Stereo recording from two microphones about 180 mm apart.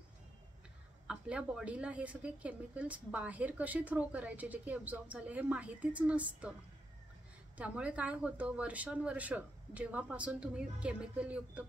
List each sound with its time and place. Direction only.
1.0 s a woman's voice: 5° right (ahead or behind)
7.5 s a woman's voice: 5° right (ahead or behind)